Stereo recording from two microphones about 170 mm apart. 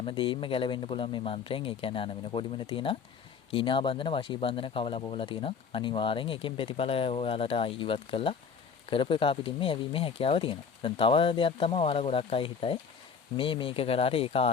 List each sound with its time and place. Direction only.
0.0 s speech: 30° left (ahead or behind)